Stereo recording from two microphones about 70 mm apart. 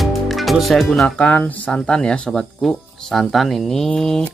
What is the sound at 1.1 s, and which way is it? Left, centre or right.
Speech, left.